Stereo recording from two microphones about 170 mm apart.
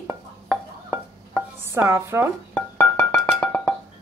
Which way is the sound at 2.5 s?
10° left (ahead or behind).